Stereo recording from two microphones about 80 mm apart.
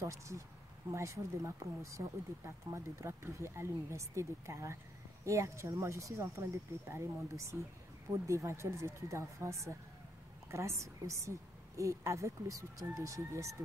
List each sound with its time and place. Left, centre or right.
0.0 s speech: right